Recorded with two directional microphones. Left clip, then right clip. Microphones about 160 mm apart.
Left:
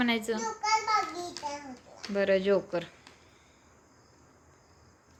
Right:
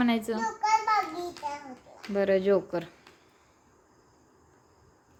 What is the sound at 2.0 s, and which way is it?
Speech, 15° right (ahead or behind).